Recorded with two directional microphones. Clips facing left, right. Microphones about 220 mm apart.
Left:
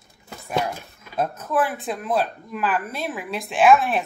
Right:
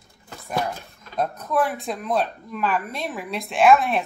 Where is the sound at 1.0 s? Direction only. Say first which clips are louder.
Left 1 dB; 5° left (ahead or behind).